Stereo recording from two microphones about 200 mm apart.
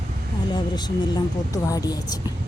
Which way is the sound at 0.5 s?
20° left (ahead or behind).